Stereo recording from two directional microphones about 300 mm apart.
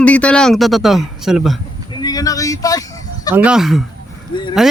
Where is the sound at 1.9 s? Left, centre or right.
Centre.